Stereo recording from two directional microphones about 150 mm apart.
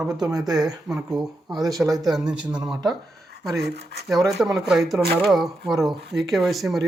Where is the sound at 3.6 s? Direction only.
90° right.